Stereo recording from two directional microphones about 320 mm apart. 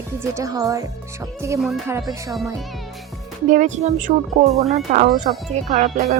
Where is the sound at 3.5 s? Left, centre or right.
Right.